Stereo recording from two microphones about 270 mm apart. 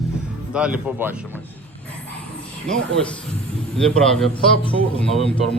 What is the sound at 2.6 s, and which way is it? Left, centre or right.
Speech, centre.